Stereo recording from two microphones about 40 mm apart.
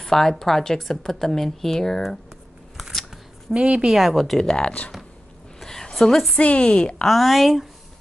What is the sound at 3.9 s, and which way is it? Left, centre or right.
Speech, centre.